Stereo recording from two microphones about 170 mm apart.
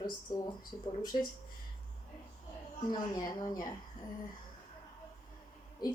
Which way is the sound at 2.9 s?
25° left (ahead or behind).